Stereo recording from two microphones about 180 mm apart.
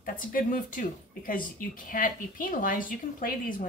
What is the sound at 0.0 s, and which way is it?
Speech, 50° left (ahead or behind).